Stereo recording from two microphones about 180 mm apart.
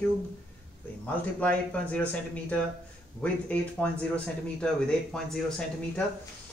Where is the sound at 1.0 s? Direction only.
10° left (ahead or behind).